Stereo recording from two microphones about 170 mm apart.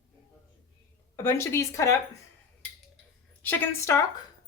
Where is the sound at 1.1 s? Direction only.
15° left (ahead or behind).